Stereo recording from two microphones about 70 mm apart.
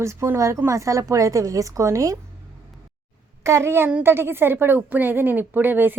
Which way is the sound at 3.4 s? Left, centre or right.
Right.